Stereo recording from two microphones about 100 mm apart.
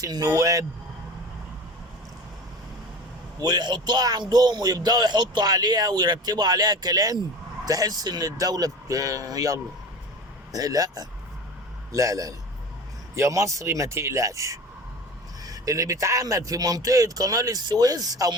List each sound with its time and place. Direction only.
0.0 s speech: 35° right (ahead or behind)
3.4 s a man's voice: 45° right (ahead or behind)